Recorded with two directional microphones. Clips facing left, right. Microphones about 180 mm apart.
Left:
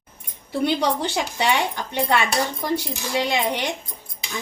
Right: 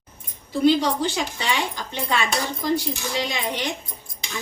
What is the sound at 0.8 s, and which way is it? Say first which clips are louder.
A woman's voice: even; 65° left (ahead or behind).